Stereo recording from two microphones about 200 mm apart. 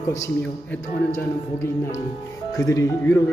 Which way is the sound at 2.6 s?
15° left (ahead or behind).